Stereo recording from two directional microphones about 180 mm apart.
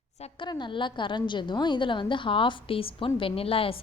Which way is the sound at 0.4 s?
25° left (ahead or behind).